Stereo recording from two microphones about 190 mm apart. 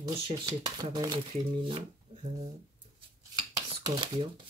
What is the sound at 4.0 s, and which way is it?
Speech, 25° right (ahead or behind).